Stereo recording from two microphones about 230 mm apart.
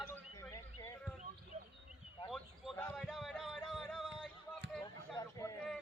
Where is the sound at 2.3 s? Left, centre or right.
Centre.